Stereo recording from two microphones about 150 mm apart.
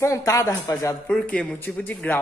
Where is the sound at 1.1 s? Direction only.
5° left (ahead or behind).